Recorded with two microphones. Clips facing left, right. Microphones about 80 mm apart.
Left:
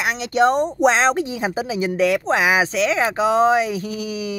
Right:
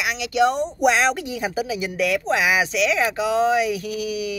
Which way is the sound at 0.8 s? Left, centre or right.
Left.